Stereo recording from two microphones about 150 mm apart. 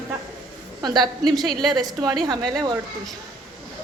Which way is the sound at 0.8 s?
30° right (ahead or behind).